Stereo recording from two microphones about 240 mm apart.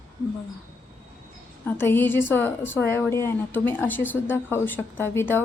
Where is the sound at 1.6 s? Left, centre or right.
Centre.